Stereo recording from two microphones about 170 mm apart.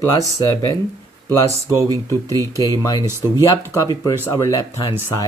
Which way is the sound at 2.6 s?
20° left (ahead or behind).